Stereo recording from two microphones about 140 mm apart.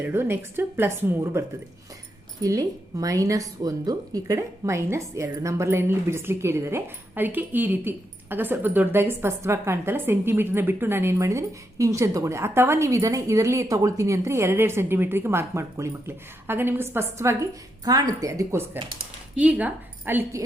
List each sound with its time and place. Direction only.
0.0 s a woman's voice: 15° right (ahead or behind)
19.4 s speech: 10° right (ahead or behind)